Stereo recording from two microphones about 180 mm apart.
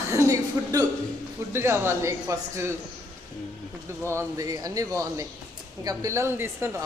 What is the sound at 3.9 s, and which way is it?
Speech, 15° right (ahead or behind).